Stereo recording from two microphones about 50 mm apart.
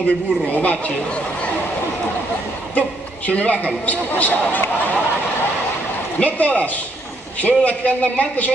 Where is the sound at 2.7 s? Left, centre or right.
Left.